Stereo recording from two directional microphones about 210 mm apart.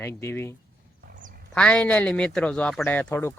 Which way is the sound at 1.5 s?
5° left (ahead or behind).